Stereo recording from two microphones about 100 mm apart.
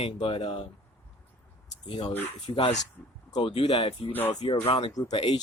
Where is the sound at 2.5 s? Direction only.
45° left (ahead or behind).